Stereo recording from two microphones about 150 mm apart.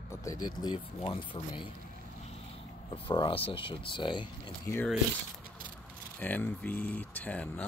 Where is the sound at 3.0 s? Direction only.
35° left (ahead or behind).